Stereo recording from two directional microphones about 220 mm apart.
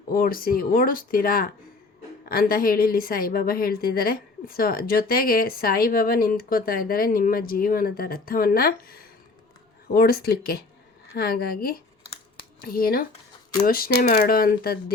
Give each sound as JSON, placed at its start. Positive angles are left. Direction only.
{"t": 0.1, "sound": "a woman's voice", "side_deg": 40}